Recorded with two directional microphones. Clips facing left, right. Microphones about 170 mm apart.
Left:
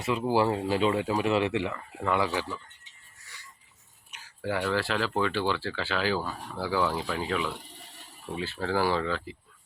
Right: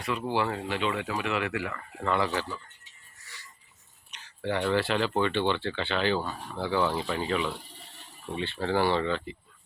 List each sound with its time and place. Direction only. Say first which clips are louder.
0.0 s speech: left 4 dB; 25° left (ahead or behind)
2.0 s speech: even; 10° left (ahead or behind)
4.1 s speech: right 1 dB; 5° left (ahead or behind)